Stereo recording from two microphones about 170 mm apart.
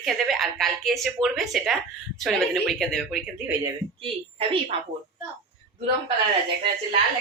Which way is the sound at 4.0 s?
35° right (ahead or behind).